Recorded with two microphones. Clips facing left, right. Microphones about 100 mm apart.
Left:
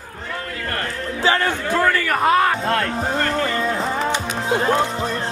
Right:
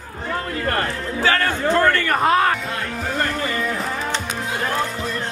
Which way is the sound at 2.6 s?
75° left (ahead or behind).